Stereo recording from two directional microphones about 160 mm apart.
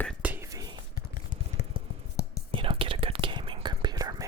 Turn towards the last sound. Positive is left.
turn(degrees=-25)  # may be behind; listen again after turning